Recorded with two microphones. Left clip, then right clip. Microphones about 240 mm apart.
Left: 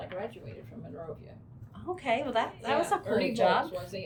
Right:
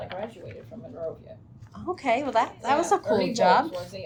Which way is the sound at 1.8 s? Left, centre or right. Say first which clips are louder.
Right 5 dB; right.